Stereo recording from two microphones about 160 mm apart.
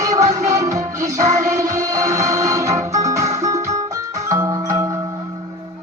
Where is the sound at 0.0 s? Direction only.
20° right (ahead or behind).